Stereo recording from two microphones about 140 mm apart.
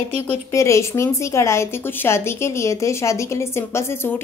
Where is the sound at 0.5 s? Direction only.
20° left (ahead or behind).